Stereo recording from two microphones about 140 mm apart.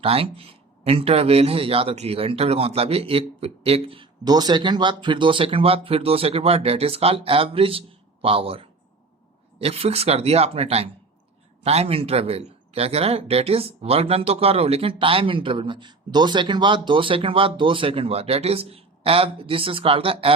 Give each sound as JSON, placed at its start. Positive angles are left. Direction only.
{"t": 0.0, "sound": "speech", "side_deg": -40}